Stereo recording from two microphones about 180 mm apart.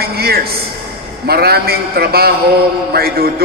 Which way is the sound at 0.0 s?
60° right (ahead or behind).